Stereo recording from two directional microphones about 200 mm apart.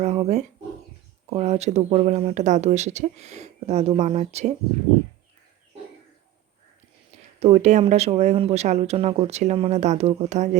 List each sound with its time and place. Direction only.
0.0 s speech: 35° right (ahead or behind)
7.3 s speech: 35° right (ahead or behind)